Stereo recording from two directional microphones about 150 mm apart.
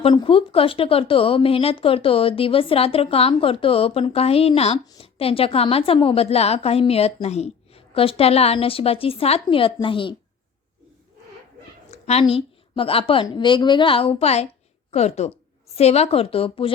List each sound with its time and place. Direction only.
0.0 s speech: 35° left (ahead or behind)
11.9 s a woman's voice: 45° left (ahead or behind)